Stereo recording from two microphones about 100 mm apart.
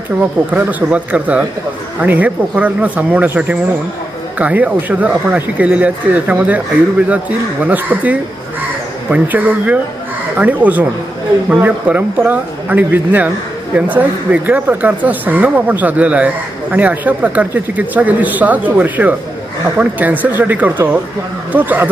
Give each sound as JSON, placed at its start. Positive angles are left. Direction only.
{"t": 0.5, "sound": "speech", "side_deg": -15}